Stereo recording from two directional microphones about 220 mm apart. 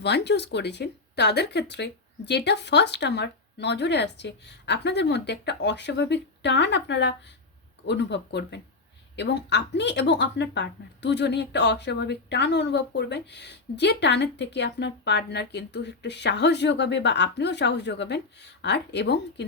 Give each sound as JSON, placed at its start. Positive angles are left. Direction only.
{"t": 0.0, "sound": "speech", "side_deg": 50}